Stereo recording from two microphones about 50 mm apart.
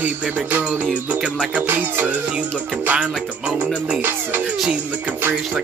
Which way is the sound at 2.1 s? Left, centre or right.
Right.